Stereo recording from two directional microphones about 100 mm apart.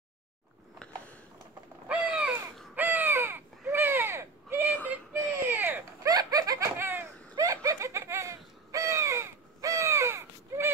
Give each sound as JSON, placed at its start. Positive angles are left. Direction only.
{"t": 1.9, "sound": "crow", "side_deg": -10}
{"t": 3.7, "sound": "a sound", "side_deg": -20}
{"t": 4.8, "sound": "baby cry", "side_deg": -20}
{"t": 6.0, "sound": "laughter", "side_deg": -40}
{"t": 6.8, "sound": "a sound", "side_deg": -25}
{"t": 7.4, "sound": "crow", "side_deg": -30}